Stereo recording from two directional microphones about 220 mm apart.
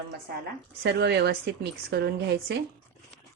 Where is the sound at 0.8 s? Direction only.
50° right (ahead or behind).